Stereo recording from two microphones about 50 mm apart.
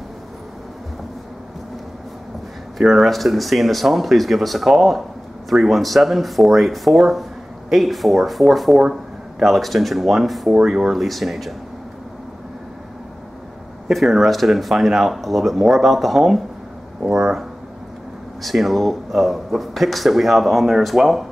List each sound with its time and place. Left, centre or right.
2.8 s speech: centre
13.8 s speech: centre